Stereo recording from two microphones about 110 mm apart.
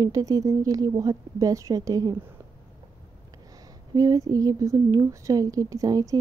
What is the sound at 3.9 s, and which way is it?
Speech, 30° right (ahead or behind).